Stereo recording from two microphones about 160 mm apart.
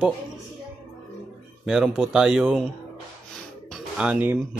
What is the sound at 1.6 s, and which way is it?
Speech, centre (ahead or behind).